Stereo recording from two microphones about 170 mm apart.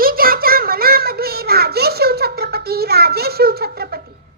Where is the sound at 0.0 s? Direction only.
60° right (ahead or behind).